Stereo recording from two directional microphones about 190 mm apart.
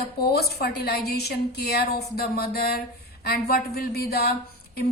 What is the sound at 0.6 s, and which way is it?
A woman's voice, 55° left (ahead or behind).